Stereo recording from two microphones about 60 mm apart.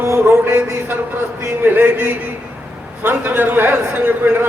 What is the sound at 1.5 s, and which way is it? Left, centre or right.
A man's voice, right.